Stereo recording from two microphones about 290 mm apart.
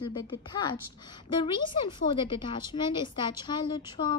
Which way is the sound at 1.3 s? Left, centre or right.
Centre.